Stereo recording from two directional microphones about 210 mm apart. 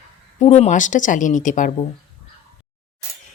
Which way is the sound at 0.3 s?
30° left (ahead or behind).